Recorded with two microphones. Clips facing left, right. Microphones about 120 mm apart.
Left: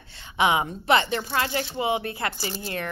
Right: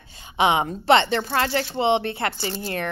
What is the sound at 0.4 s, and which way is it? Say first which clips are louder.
Speech: right 2 dB; 25° right (ahead or behind).